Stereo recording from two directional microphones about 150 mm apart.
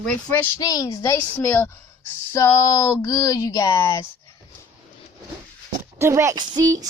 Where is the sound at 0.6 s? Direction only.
25° left (ahead or behind).